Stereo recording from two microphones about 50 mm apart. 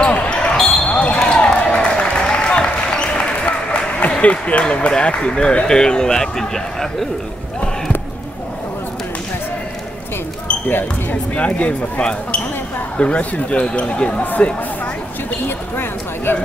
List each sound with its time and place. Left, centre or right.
0.0 s basketball bounce: left
0.6 s basketball bounce: centre
0.8 s basketball bounce: left
1.6 s applause: left
10.7 s speech: left
11.3 s speech: left
14.2 s speech: left
15.4 s a sound: left